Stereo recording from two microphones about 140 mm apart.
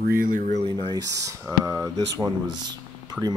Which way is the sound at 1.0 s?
25° right (ahead or behind).